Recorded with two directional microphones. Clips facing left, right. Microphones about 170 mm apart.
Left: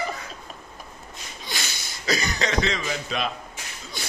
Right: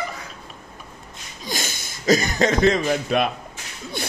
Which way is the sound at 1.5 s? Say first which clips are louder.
Right 6 dB; 45° right (ahead or behind).